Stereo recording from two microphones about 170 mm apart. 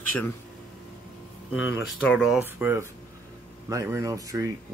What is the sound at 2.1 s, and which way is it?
Speech, centre (ahead or behind).